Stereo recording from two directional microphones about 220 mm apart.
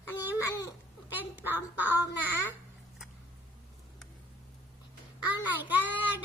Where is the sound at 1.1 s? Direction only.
10° right (ahead or behind).